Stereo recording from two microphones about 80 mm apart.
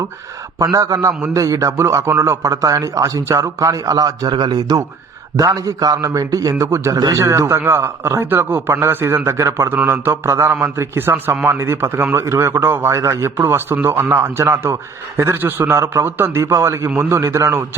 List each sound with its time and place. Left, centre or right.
0.6 s speech: right
5.4 s a man's voice: right